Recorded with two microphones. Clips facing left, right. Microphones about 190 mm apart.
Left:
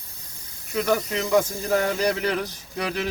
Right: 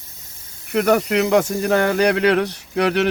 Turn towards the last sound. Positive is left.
turn(degrees=-70)  # may be behind; listen again after turning